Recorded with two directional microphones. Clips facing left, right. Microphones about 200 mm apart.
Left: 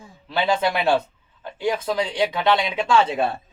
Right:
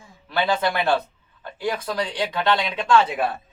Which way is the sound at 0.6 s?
10° left (ahead or behind).